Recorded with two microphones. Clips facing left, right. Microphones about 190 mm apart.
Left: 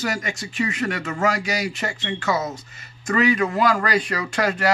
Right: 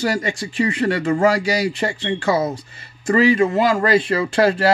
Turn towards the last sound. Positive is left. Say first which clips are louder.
# right 6 dB
turn(degrees=-30)  # may be behind; listen again after turning